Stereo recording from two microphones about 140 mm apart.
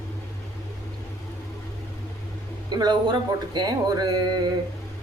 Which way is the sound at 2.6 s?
30° right (ahead or behind).